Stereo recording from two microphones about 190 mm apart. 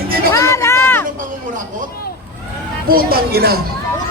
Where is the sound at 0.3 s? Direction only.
15° left (ahead or behind).